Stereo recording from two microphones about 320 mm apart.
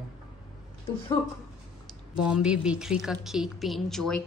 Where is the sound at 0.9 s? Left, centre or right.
Centre.